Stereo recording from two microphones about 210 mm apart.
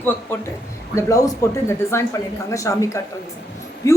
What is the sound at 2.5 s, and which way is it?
A woman's voice, 15° left (ahead or behind).